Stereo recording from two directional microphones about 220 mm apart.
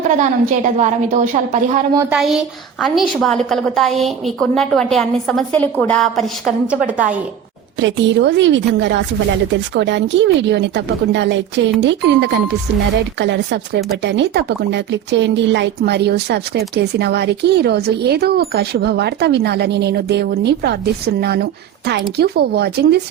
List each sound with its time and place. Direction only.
0.2 s a woman's voice: 35° right (ahead or behind)
2.0 s a woman's voice: 5° right (ahead or behind)
7.8 s a woman's voice: 55° right (ahead or behind)